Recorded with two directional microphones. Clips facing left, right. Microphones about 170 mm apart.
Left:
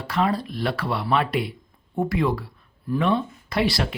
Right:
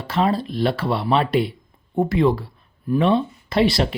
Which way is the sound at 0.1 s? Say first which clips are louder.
Right 3 dB; 25° right (ahead or behind).